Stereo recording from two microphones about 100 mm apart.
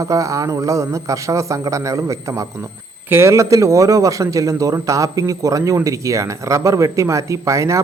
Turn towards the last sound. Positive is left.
turn(degrees=-30)  # may be behind; listen again after turning